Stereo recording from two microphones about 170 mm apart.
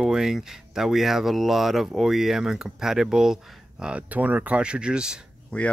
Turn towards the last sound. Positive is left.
turn(degrees=5)  # may be behind; listen again after turning